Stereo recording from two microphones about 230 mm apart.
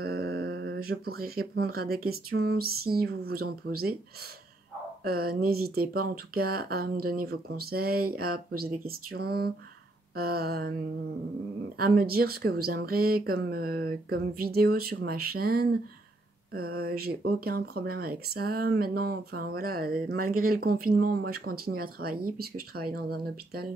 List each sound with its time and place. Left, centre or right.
0.0 s mantra: right
1.5 s speech: right
5.0 s speech: right
11.8 s speech: right